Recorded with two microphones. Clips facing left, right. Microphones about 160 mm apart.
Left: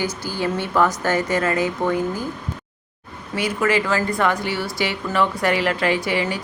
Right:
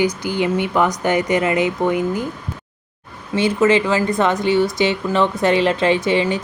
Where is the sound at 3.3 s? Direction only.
25° right (ahead or behind).